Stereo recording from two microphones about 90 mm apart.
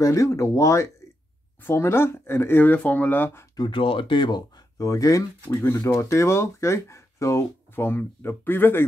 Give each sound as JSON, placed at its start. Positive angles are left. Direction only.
{"t": 0.0, "sound": "speech", "side_deg": 35}
{"t": 3.5, "sound": "speech", "side_deg": 55}
{"t": 3.8, "sound": "speech", "side_deg": 75}
{"t": 4.7, "sound": "speech", "side_deg": 40}